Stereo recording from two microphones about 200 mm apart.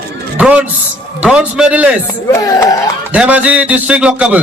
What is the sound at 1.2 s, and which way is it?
Speech, 5° right (ahead or behind).